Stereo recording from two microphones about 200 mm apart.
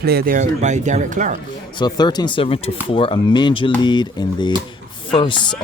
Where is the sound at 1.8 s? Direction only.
20° left (ahead or behind).